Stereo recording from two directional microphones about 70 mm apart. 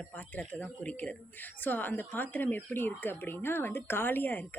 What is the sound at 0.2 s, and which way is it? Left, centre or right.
Speech, left.